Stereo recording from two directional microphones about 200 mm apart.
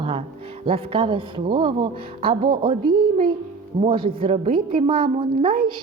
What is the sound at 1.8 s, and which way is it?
Speech, 50° right (ahead or behind).